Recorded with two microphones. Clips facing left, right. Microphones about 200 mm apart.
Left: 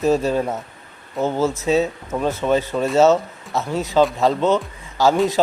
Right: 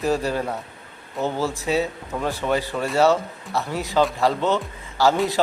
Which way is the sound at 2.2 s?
20° left (ahead or behind).